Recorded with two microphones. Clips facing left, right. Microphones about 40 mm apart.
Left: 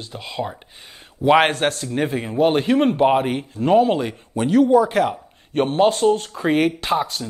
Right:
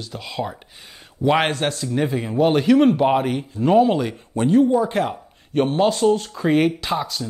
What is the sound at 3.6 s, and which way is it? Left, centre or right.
Speech, right.